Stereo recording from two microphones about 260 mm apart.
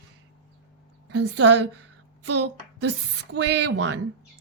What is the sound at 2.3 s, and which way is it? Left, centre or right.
Speech, right.